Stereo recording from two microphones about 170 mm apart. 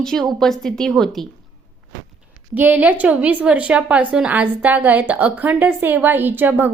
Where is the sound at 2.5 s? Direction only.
10° right (ahead or behind).